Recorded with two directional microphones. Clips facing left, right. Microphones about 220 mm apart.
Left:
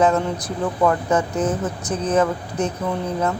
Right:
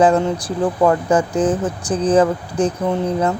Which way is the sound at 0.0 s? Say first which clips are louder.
Right 4 dB; 30° right (ahead or behind).